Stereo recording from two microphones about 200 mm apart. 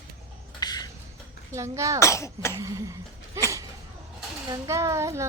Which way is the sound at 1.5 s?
15° right (ahead or behind).